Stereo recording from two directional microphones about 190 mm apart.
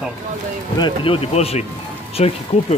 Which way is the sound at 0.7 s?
25° left (ahead or behind).